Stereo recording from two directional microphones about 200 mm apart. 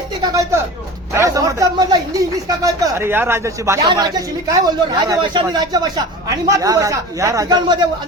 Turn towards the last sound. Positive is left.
turn(degrees=-20)  # may be behind; listen again after turning